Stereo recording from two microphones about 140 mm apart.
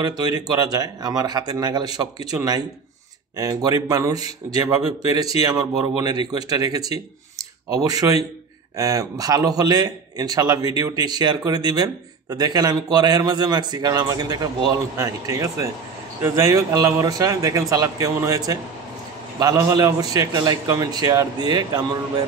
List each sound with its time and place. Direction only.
0.0 s a man's voice: 30° right (ahead or behind)